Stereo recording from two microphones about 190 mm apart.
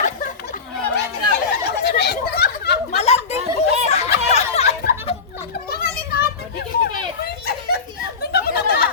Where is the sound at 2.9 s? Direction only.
35° left (ahead or behind).